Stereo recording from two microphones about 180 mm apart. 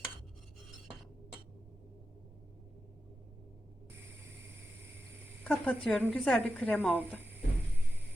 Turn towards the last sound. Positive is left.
turn(degrees=10)  # may be behind; listen again after turning